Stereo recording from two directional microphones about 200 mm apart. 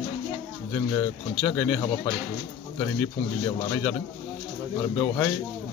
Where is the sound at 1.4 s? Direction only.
10° left (ahead or behind).